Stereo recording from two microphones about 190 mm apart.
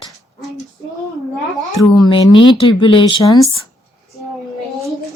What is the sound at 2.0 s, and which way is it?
Speech, 25° left (ahead or behind).